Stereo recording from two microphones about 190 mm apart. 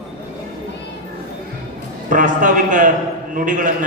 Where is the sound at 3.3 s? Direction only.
40° right (ahead or behind).